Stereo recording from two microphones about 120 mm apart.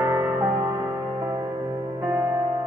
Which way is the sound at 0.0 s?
25° right (ahead or behind).